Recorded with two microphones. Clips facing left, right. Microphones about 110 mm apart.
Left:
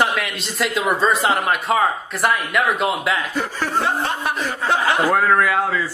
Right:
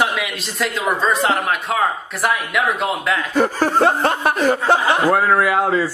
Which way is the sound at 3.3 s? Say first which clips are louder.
Right 6 dB; 45° right (ahead or behind).